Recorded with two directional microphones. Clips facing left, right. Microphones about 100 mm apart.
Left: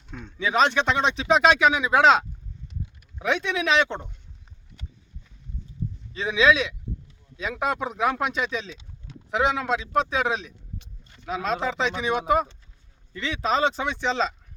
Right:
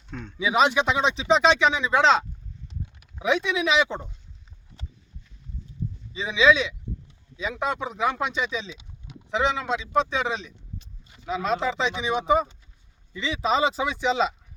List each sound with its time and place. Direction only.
0.1 s speech: 5° left (ahead or behind)
0.3 s speech: 10° right (ahead or behind)
6.1 s speech: centre (ahead or behind)
8.7 s a sound: 15° right (ahead or behind)
9.3 s speech: 5° left (ahead or behind)